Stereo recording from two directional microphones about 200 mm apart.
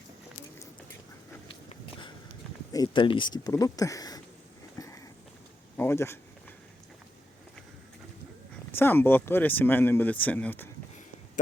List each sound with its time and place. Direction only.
1.7 s sniff: 25° left (ahead or behind)
2.7 s speech: 20° left (ahead or behind)
4.8 s a sound: 15° left (ahead or behind)
8.7 s speech: 10° left (ahead or behind)